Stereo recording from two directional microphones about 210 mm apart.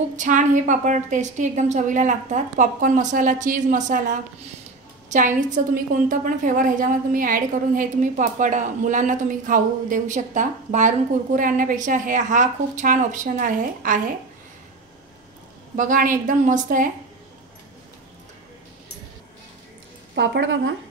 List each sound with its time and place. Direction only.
0.1 s a woman's voice: 35° right (ahead or behind)
15.7 s a woman's voice: 40° right (ahead or behind)
20.2 s speech: 60° right (ahead or behind)